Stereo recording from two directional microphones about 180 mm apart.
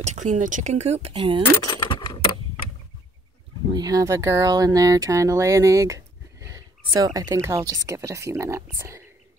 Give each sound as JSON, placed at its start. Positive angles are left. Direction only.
{"t": 0.0, "sound": "speech", "side_deg": -40}
{"t": 1.7, "sound": "keys jangling", "side_deg": 25}
{"t": 3.7, "sound": "speech", "side_deg": -20}